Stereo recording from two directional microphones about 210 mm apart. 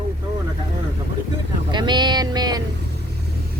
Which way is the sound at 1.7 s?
20° right (ahead or behind).